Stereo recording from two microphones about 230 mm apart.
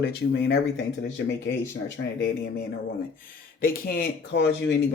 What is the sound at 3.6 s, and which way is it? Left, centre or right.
Speech, left.